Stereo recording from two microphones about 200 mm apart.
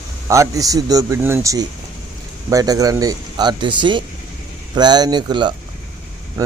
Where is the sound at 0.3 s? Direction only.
15° right (ahead or behind).